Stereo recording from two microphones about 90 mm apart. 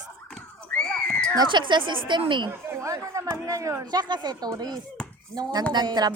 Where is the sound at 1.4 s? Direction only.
60° right (ahead or behind).